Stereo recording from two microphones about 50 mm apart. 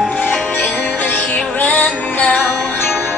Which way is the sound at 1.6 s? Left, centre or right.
Left.